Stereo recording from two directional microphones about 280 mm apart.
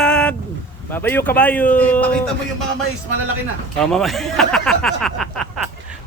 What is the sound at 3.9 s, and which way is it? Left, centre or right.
Speech, centre.